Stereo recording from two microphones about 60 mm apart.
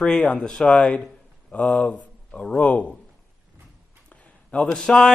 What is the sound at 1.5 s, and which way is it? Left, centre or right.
Speech, left.